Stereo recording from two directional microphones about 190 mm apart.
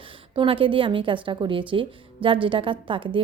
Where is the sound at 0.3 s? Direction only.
30° right (ahead or behind).